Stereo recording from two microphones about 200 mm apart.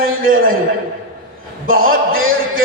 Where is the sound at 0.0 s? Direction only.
45° right (ahead or behind).